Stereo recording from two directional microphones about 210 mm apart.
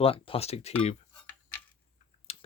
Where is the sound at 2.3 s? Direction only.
30° left (ahead or behind).